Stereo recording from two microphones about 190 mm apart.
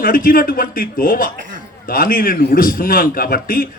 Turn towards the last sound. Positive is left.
turn(degrees=50)  # may be behind; listen again after turning